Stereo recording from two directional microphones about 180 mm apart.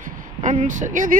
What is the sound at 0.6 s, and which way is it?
Speech, 45° right (ahead or behind).